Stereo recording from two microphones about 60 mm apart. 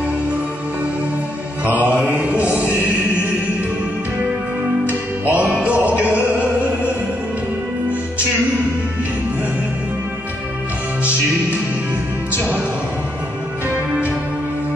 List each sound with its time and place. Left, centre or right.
1.7 s mantra: right
5.2 s music: right